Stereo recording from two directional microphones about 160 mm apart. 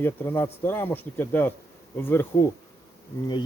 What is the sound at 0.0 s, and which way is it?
Speech, 15° left (ahead or behind).